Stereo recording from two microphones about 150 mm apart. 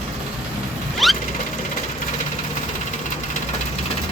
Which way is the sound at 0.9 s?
Centre (ahead or behind).